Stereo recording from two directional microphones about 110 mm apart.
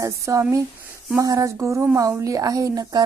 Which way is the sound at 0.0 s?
25° right (ahead or behind).